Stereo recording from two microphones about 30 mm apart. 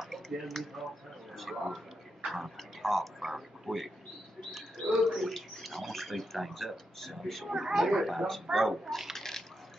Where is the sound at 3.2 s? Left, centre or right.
Centre.